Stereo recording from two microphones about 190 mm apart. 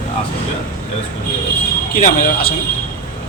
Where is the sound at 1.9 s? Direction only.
50° left (ahead or behind).